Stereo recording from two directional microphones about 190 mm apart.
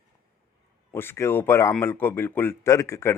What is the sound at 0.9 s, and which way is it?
Speech, 15° left (ahead or behind).